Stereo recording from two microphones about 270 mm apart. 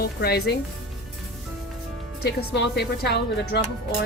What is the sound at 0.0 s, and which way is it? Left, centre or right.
Speech, left.